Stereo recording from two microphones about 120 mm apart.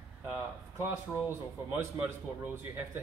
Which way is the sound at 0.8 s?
20° right (ahead or behind).